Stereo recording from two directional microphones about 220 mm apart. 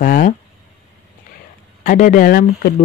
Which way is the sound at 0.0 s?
40° left (ahead or behind).